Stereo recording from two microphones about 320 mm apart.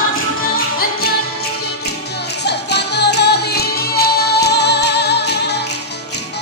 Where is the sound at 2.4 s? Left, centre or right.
Left.